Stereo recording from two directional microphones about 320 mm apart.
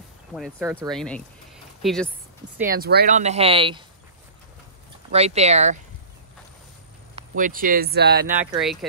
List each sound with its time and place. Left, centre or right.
0.3 s speech: centre
2.6 s speech: right
5.1 s speech: centre
7.2 s speech: right
8.4 s speech: centre